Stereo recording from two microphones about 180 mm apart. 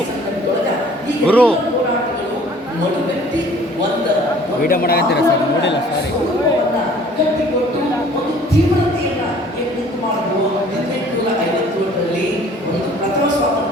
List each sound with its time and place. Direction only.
1.3 s a man's voice: 5° left (ahead or behind)
4.7 s speech: 55° left (ahead or behind)